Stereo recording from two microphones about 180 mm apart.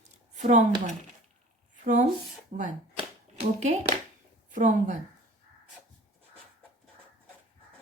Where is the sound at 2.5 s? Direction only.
40° right (ahead or behind).